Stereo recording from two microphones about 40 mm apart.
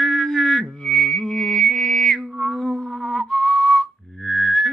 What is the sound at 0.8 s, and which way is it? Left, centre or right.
Music, centre.